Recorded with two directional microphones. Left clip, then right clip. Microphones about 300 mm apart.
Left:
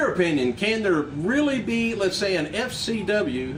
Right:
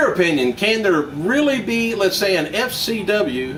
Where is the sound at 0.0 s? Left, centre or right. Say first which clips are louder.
Right 6 dB; centre.